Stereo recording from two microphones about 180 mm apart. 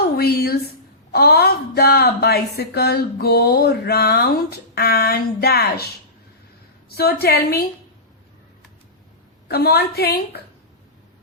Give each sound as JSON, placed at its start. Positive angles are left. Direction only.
{"t": 0.2, "sound": "a sound", "side_deg": 60}
{"t": 1.1, "sound": "a woman's voice", "side_deg": 60}
{"t": 9.5, "sound": "a woman's voice", "side_deg": 60}